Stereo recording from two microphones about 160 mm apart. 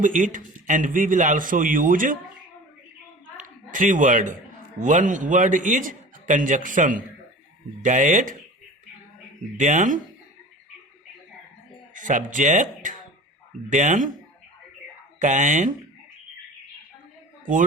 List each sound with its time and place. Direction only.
0.0 s a man's voice: 55° right (ahead or behind)
3.3 s a sound: 55° right (ahead or behind)
4.8 s a man's voice: 50° right (ahead or behind)
9.6 s a man's voice: 50° right (ahead or behind)
11.9 s a man's voice: 55° right (ahead or behind)
15.2 s a man's voice: 50° right (ahead or behind)